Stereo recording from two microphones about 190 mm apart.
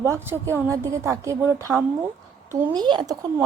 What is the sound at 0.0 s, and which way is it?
Speech, 15° right (ahead or behind).